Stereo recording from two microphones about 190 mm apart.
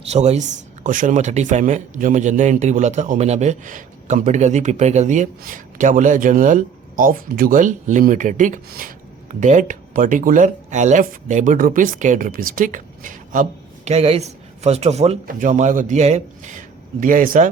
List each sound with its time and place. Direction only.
0.0 s speech: 35° right (ahead or behind)